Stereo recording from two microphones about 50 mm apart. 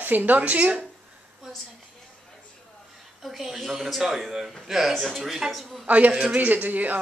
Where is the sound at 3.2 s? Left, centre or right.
Centre.